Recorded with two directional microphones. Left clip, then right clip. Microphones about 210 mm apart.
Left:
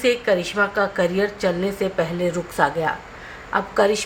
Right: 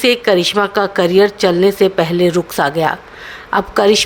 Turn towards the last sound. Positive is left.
turn(degrees=-45)  # may be behind; listen again after turning